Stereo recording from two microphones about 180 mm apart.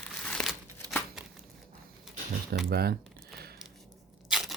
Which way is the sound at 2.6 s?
60° right (ahead or behind).